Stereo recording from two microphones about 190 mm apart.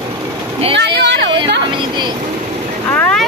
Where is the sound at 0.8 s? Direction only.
65° right (ahead or behind).